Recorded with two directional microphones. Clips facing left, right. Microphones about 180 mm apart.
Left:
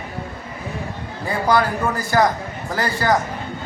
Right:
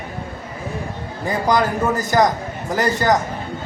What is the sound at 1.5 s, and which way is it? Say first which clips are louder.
A man's voice: right 1 dB; 20° right (ahead or behind).